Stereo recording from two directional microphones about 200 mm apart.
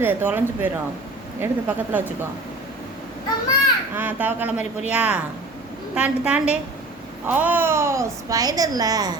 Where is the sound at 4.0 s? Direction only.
10° right (ahead or behind).